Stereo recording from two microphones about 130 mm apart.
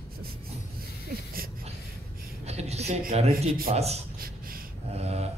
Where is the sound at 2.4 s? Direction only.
55° right (ahead or behind).